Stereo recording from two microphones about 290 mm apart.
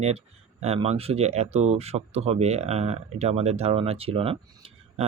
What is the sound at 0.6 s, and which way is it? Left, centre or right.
Speech, right.